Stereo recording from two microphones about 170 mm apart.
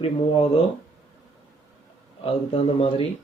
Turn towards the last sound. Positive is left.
turn(degrees=35)  # may be behind; listen again after turning